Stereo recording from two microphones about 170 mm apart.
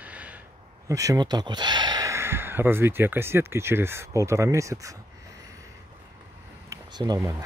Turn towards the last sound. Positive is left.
turn(degrees=-20)  # may be behind; listen again after turning